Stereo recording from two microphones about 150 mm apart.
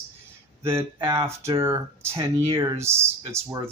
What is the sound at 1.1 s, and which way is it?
Speech, 20° right (ahead or behind).